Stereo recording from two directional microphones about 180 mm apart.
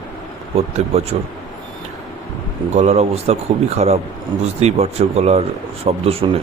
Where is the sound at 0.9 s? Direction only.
35° right (ahead or behind).